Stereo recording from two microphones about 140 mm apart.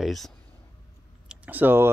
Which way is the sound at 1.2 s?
10° right (ahead or behind).